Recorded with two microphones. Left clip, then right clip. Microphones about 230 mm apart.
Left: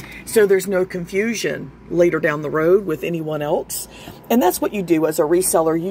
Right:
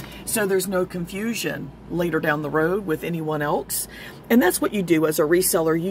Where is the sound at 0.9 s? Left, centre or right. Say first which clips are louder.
Left 7 dB; centre.